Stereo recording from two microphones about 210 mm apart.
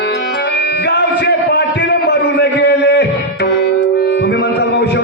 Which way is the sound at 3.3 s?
50° left (ahead or behind).